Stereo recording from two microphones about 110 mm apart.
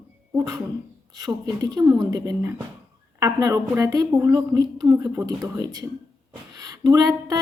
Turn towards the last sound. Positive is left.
turn(degrees=-35)  # may be behind; listen again after turning